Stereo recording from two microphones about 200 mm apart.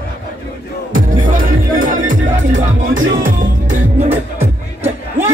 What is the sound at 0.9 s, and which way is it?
Music, 40° right (ahead or behind).